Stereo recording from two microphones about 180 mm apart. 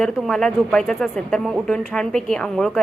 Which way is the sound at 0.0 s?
5° left (ahead or behind).